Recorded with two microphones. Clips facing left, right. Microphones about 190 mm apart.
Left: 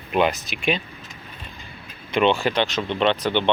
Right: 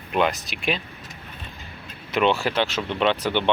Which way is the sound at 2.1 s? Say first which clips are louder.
Left 2 dB; 5° right (ahead or behind).